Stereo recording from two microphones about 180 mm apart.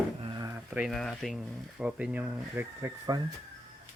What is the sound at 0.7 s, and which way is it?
Speech, 5° right (ahead or behind).